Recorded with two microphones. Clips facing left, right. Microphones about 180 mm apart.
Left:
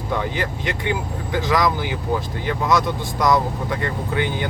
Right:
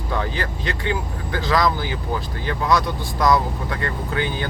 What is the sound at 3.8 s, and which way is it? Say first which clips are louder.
Speech: even; 15° left (ahead or behind).